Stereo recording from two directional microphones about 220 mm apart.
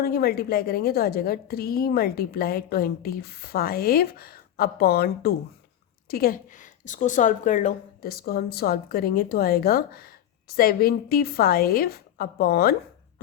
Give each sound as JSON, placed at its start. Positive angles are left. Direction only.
{"t": 0.0, "sound": "a woman's voice", "side_deg": 45}